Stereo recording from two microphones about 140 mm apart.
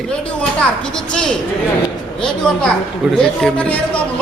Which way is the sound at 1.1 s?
5° left (ahead or behind).